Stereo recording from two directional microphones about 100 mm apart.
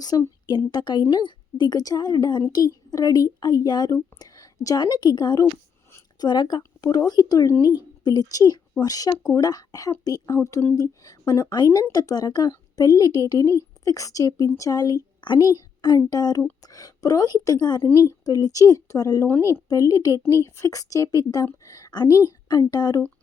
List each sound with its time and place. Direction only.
0.1 s a woman's voice: 35° left (ahead or behind)
10.3 s speech: 30° left (ahead or behind)
10.8 s a woman's voice: 40° left (ahead or behind)
17.9 s speech: 10° left (ahead or behind)
18.3 s speech: 40° left (ahead or behind)
21.6 s a sound: 35° left (ahead or behind)
22.3 s speech: 40° left (ahead or behind)